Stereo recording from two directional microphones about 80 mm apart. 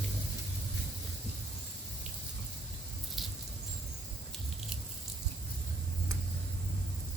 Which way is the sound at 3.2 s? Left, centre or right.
Centre.